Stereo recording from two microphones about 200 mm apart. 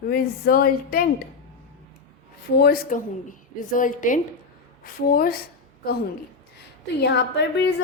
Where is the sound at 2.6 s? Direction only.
45° left (ahead or behind).